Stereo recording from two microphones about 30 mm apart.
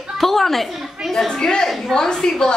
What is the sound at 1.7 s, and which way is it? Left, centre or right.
Speech, centre.